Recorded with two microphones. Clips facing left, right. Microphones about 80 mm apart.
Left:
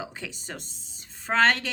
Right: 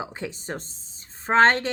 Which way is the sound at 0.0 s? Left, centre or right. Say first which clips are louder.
Right 5 dB; right.